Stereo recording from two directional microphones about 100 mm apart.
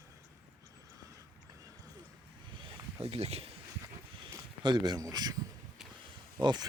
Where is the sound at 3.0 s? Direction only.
90° right.